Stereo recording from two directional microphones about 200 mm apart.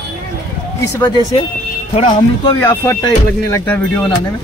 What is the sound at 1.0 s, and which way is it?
Speech, 25° left (ahead or behind).